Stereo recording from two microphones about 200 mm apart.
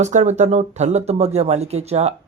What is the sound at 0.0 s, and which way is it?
Speech, 35° right (ahead or behind).